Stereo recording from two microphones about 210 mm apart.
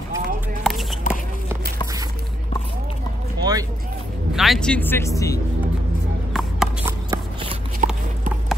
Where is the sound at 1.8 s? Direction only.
15° right (ahead or behind).